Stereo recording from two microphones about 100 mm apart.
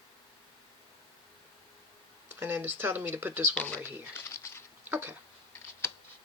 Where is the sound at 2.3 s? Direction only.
20° right (ahead or behind).